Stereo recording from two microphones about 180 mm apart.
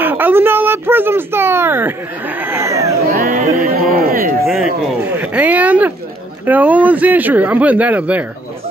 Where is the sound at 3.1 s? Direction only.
50° right (ahead or behind).